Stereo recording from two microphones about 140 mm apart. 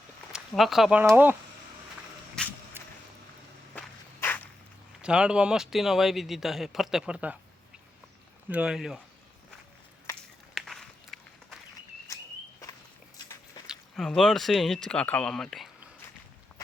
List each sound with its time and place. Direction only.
0.3 s speech: centre (ahead or behind)
1.0 s speech: 15° right (ahead or behind)
2.4 s vehicle: 5° left (ahead or behind)
3.8 s walk: 10° left (ahead or behind)
5.0 s speech: 5° right (ahead or behind)
8.4 s speech: 10° right (ahead or behind)
10.5 s walk: centre (ahead or behind)
12.0 s a sound: 25° left (ahead or behind)
13.7 s speech: 5° left (ahead or behind)